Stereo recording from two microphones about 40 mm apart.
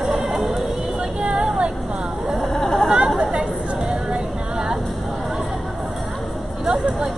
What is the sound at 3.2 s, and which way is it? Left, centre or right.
Chatter, centre.